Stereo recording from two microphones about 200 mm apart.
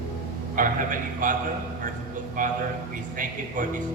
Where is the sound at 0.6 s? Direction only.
40° right (ahead or behind).